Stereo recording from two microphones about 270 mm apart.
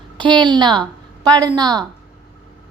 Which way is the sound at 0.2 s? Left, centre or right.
Centre.